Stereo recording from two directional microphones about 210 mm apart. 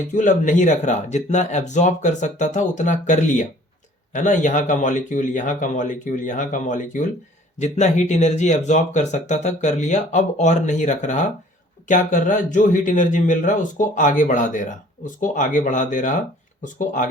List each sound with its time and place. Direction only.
0.1 s speech: 35° left (ahead or behind)